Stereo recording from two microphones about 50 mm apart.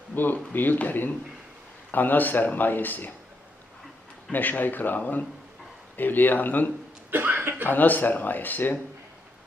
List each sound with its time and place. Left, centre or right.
0.5 s speech: left
4.3 s speech: left
7.1 s speech: right
7.7 s speech: left